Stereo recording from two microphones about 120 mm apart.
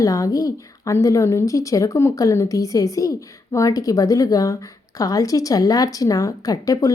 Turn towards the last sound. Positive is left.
turn(degrees=30)  # may be behind; listen again after turning